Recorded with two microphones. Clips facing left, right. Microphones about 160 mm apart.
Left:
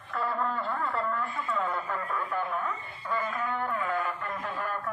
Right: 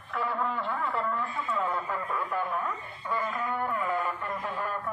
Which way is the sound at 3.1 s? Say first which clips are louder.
Even; 10° right (ahead or behind).